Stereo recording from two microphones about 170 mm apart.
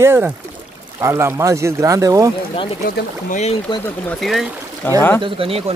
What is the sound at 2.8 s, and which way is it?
Speech, 45° left (ahead or behind).